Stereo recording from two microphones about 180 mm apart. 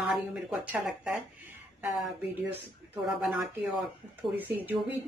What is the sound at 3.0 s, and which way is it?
Speech, 5° right (ahead or behind).